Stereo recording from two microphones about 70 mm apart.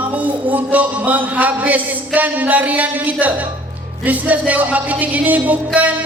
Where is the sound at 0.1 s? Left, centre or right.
Right.